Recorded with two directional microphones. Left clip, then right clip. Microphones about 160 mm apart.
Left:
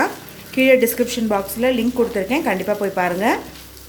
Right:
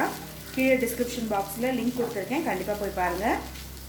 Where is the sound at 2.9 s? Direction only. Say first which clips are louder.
Left 6 dB; 60° left (ahead or behind).